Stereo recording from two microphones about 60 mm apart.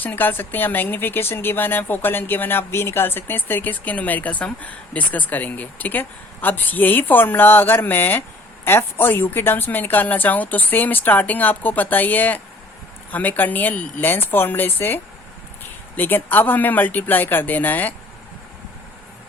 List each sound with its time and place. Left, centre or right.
0.0 s a woman's voice: left